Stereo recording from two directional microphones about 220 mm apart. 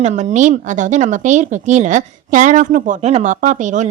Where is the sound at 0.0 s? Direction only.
30° right (ahead or behind).